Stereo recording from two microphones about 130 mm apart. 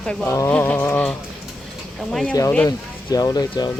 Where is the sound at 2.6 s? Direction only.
30° left (ahead or behind).